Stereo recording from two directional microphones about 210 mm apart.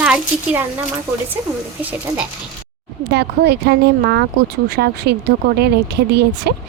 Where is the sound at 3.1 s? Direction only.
50° right (ahead or behind).